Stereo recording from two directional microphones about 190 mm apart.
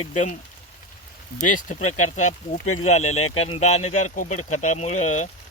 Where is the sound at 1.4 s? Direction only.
40° left (ahead or behind).